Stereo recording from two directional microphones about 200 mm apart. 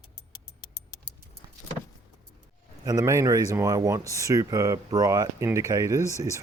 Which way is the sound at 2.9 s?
15° right (ahead or behind).